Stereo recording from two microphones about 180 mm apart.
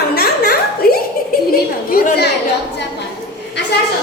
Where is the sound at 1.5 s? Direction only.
60° left (ahead or behind).